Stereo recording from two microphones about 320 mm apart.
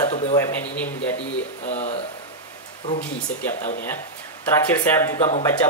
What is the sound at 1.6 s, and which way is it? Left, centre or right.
Speech, left.